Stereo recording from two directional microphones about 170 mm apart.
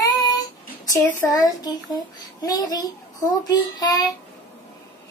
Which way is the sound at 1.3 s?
20° left (ahead or behind).